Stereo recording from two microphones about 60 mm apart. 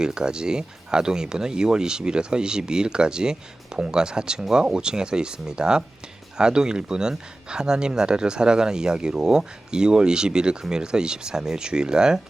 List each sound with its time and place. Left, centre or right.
0.0 s speech: centre